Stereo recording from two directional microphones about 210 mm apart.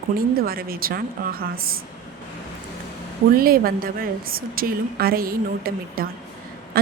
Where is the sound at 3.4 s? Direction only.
45° right (ahead or behind).